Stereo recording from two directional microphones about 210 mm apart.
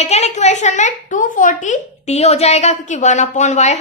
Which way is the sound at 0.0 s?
30° left (ahead or behind).